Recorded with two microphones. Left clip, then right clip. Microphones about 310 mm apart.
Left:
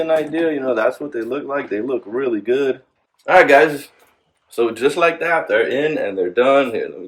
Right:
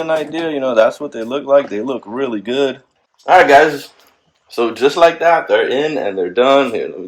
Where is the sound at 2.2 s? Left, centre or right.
Right.